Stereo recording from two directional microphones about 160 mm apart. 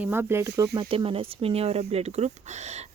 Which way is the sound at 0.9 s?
35° right (ahead or behind).